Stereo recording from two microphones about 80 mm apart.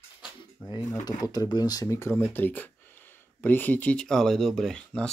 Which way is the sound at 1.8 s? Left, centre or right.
Left.